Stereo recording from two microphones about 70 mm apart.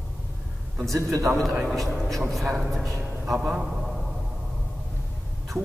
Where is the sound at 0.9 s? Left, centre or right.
Right.